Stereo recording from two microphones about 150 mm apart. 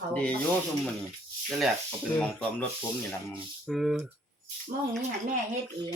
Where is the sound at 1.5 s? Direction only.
Centre (ahead or behind).